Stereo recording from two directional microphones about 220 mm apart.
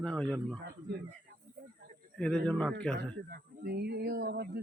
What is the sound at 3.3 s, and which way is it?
A man's voice, 45° right (ahead or behind).